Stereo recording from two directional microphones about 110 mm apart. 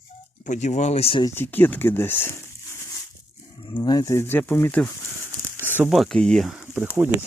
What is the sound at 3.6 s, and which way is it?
Speech, 45° left (ahead or behind).